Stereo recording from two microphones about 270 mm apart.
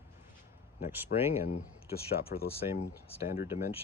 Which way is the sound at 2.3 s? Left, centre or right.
Left.